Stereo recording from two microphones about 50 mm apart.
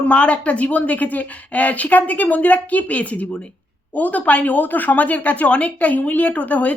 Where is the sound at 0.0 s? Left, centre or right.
Left.